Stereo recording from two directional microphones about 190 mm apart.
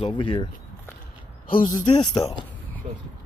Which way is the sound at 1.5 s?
25° left (ahead or behind).